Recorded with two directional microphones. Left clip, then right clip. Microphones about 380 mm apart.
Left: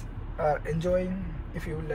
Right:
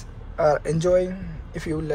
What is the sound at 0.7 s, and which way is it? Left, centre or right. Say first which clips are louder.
Speech: right 8 dB; centre.